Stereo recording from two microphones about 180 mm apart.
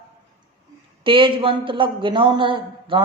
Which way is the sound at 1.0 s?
30° right (ahead or behind).